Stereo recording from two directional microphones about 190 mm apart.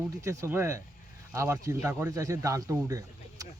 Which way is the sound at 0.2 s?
15° right (ahead or behind).